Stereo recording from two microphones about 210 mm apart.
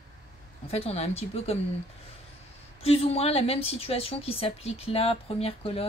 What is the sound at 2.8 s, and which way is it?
A woman's voice, 30° left (ahead or behind).